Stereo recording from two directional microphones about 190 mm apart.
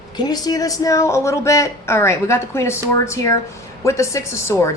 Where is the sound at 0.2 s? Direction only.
20° left (ahead or behind).